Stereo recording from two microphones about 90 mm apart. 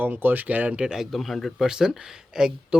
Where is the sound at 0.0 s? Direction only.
20° right (ahead or behind).